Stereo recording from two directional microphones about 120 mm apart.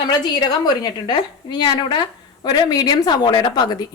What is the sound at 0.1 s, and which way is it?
A woman's voice, 35° left (ahead or behind).